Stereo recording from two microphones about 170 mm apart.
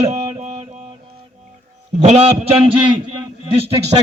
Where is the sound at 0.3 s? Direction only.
35° right (ahead or behind).